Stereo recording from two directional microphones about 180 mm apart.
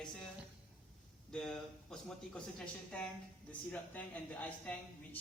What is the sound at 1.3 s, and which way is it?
Speech, 5° left (ahead or behind).